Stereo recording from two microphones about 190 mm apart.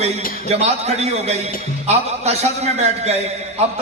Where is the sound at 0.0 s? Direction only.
35° right (ahead or behind).